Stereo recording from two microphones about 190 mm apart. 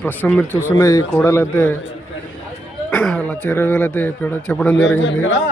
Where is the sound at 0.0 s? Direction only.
10° left (ahead or behind).